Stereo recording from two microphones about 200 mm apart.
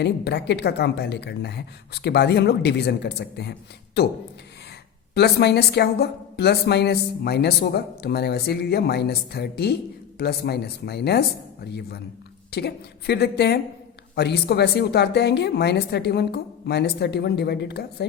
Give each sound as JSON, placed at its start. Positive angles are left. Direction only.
{"t": 0.0, "sound": "a woman's voice", "side_deg": 60}
{"t": 5.1, "sound": "a woman's voice", "side_deg": 55}
{"t": 12.5, "sound": "a woman's voice", "side_deg": 55}